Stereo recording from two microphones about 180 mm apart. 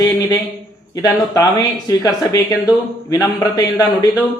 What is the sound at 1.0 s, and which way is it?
Speech, 20° left (ahead or behind).